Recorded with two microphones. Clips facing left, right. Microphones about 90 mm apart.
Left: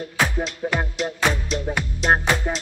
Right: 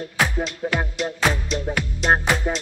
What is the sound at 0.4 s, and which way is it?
Music, centre (ahead or behind).